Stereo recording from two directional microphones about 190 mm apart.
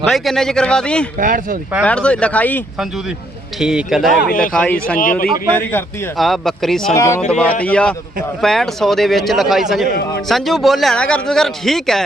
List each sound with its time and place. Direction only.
0.0 s a man's voice: centre (ahead or behind)
1.2 s speech: 45° right (ahead or behind)
1.8 s speech: 5° left (ahead or behind)
3.6 s a man's voice: 5° right (ahead or behind)
6.9 s speech: 15° left (ahead or behind)
7.3 s a man's voice: 5° left (ahead or behind)